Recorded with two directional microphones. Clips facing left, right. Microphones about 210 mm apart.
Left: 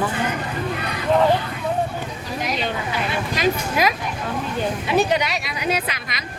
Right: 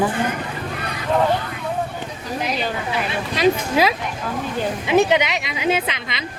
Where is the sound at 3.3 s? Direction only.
30° right (ahead or behind).